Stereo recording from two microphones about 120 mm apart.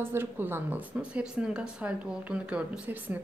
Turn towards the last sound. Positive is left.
turn(degrees=-15)  # may be behind; listen again after turning